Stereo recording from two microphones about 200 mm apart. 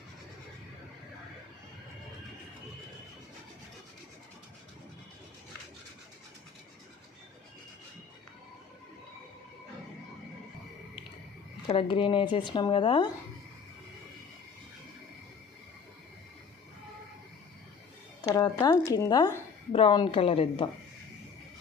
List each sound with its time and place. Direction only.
11.7 s a woman's voice: 25° left (ahead or behind)
18.3 s a woman's voice: 20° left (ahead or behind)